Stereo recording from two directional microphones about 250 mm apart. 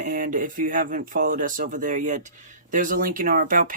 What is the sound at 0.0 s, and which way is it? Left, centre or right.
Speech, right.